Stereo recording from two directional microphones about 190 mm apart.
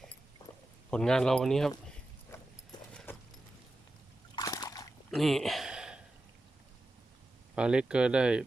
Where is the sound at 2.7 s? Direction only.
20° left (ahead or behind).